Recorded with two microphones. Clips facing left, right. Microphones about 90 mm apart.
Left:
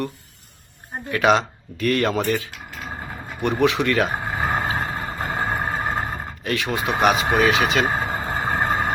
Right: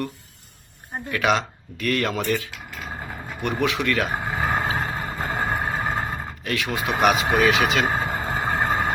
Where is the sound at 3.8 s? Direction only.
15° left (ahead or behind).